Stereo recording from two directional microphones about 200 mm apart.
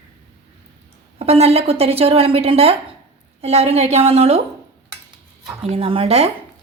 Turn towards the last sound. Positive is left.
turn(degrees=-30)  # may be behind; listen again after turning